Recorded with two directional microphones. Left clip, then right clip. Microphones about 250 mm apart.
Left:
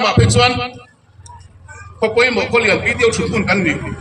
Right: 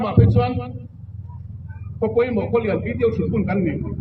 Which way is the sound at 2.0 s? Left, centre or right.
Left.